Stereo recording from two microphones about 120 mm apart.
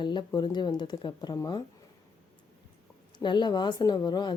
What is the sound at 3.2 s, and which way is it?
Speech, 40° left (ahead or behind).